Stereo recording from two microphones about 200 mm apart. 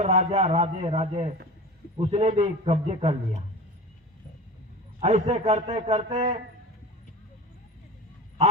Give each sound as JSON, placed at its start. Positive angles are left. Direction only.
{"t": 0.0, "sound": "a man's voice", "side_deg": -35}
{"t": 4.9, "sound": "a man's voice", "side_deg": -30}